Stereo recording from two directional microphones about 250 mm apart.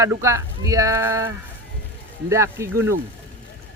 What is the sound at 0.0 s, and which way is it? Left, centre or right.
Speech, centre.